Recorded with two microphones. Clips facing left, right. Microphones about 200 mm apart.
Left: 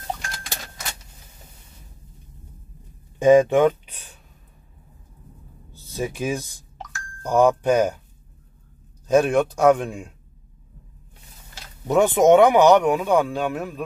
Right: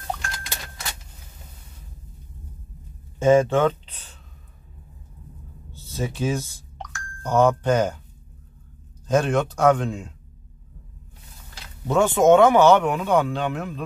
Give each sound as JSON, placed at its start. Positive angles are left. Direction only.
{"t": 3.2, "sound": "speech", "side_deg": 15}
{"t": 5.9, "sound": "speech", "side_deg": 10}
{"t": 6.8, "sound": "music", "side_deg": 5}
{"t": 9.0, "sound": "speech", "side_deg": 10}
{"t": 11.9, "sound": "speech", "side_deg": 20}